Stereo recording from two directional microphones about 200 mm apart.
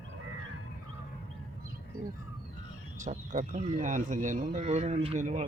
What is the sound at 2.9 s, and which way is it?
Speech, 40° right (ahead or behind).